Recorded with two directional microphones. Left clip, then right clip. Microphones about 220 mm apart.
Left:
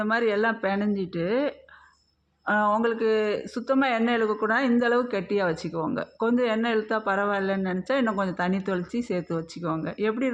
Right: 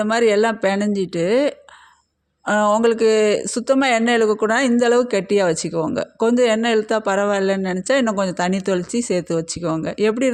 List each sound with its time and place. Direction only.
0.0 s speech: 35° right (ahead or behind)